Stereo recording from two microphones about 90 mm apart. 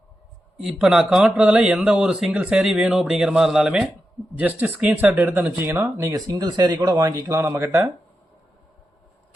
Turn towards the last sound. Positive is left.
turn(degrees=-30)  # may be behind; listen again after turning